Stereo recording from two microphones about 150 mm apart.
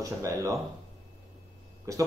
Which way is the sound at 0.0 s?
20° right (ahead or behind).